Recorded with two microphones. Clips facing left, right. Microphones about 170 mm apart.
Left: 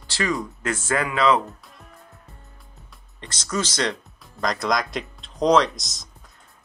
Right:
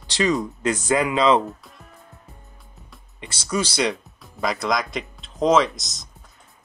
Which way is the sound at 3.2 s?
10° right (ahead or behind).